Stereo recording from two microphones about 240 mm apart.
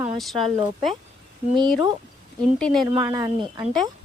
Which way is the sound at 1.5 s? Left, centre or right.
Centre.